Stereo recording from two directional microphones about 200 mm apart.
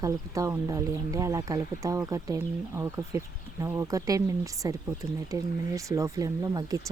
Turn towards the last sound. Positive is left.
turn(degrees=-20)  # may be behind; listen again after turning